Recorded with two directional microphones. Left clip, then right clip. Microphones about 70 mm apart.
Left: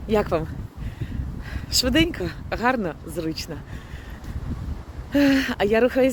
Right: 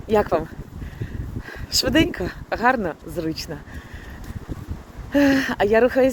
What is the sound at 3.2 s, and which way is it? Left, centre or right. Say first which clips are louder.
Speech: right 1 dB; left.